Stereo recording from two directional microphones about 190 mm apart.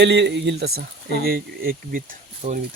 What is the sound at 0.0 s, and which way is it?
Speech, 70° right (ahead or behind).